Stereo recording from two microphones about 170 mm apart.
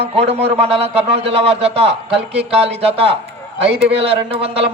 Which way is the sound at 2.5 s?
35° right (ahead or behind).